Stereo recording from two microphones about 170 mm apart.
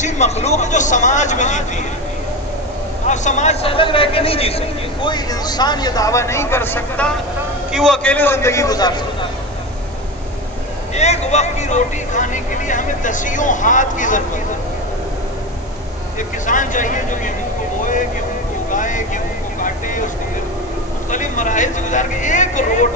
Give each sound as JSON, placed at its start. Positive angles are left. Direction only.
{"t": 0.0, "sound": "speech", "side_deg": 40}
{"t": 3.1, "sound": "a man's voice", "side_deg": 45}
{"t": 7.7, "sound": "a man's voice", "side_deg": 0}
{"t": 11.0, "sound": "speech", "side_deg": 40}
{"t": 16.2, "sound": "speech", "side_deg": 50}
{"t": 18.7, "sound": "vehicle", "side_deg": 50}
{"t": 21.1, "sound": "speech", "side_deg": 50}